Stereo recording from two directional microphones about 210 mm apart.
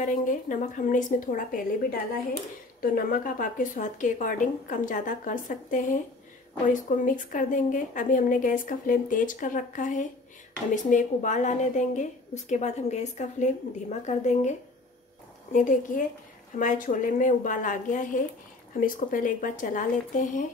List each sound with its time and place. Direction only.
0.0 s a woman's voice: 40° left (ahead or behind)
2.8 s a woman's voice: 40° left (ahead or behind)
15.5 s a woman's voice: 40° left (ahead or behind)